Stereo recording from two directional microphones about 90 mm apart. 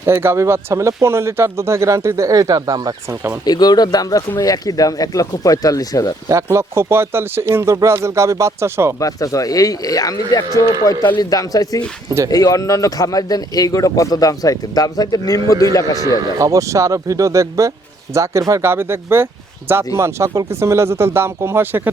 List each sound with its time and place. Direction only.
0.0 s speech: 30° right (ahead or behind)
3.4 s speech: 50° left (ahead or behind)
6.2 s speech: 35° right (ahead or behind)
9.0 s speech: 40° left (ahead or behind)
16.4 s speech: 35° right (ahead or behind)